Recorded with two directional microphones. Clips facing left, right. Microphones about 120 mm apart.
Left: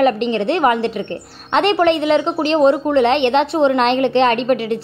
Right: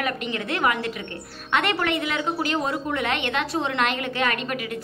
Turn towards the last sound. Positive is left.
turn(degrees=25)  # may be behind; listen again after turning